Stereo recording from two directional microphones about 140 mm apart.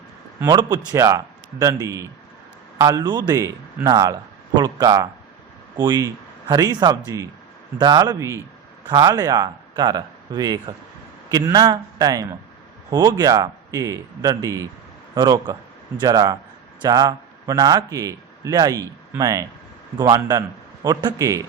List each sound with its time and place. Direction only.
0.9 s a man's voice: 20° right (ahead or behind)